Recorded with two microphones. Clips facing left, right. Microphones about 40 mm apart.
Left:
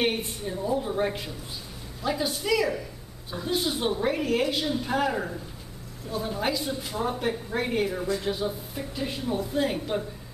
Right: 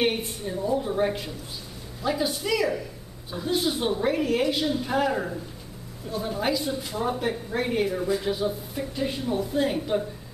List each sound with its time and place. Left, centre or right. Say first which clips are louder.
0.0 s a woman's voice: right 1 dB; centre